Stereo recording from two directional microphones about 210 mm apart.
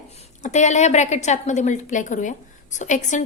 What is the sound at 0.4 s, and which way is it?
A woman's voice, 35° left (ahead or behind).